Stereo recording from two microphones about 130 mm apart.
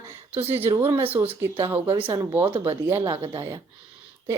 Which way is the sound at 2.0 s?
45° right (ahead or behind).